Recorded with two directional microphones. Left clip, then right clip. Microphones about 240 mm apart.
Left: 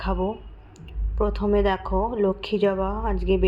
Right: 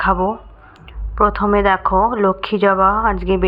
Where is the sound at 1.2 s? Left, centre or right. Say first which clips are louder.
Right 8 dB; centre.